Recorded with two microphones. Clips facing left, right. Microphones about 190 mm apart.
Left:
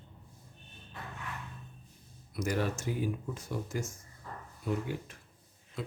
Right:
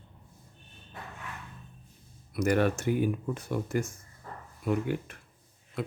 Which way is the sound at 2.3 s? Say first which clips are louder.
Right 7 dB; 60° right (ahead or behind).